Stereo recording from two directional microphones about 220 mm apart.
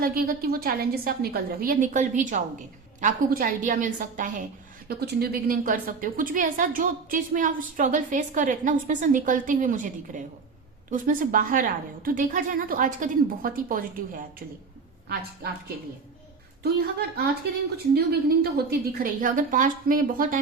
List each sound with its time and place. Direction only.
0.0 s a woman's voice: 45° right (ahead or behind)
16.6 s a woman's voice: 45° right (ahead or behind)